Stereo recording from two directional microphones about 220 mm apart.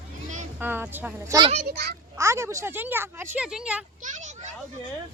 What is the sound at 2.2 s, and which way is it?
Speech, 15° right (ahead or behind).